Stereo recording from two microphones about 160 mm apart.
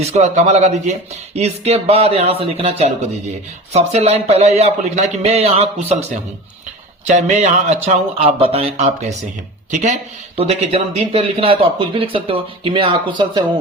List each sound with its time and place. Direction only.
0.1 s speech: 45° right (ahead or behind)
7.0 s speech: 45° right (ahead or behind); by 13.4 s 30° right (ahead or behind)